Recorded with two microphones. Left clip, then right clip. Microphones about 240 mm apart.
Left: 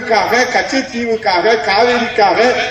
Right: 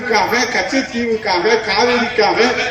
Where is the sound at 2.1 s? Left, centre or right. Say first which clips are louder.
Left 4 dB; centre.